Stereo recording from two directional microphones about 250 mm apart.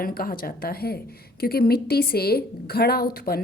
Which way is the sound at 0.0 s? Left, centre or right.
Left.